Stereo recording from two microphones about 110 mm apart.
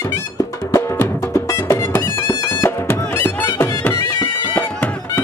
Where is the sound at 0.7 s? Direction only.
25° left (ahead or behind).